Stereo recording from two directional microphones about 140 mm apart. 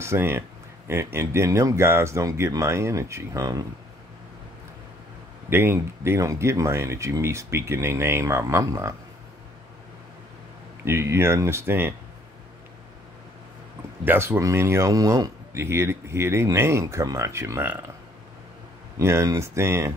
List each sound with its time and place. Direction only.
0.0 s a man's voice: 20° right (ahead or behind)
5.5 s a man's voice: 15° right (ahead or behind)
10.9 s a man's voice: 20° right (ahead or behind)
14.0 s a man's voice: 15° right (ahead or behind)
18.9 s a man's voice: 20° right (ahead or behind)